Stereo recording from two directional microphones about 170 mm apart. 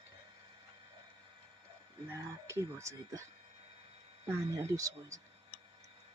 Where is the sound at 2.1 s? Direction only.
15° right (ahead or behind).